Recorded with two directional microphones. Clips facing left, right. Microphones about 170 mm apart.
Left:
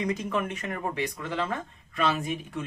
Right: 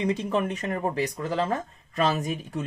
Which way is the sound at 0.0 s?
30° right (ahead or behind).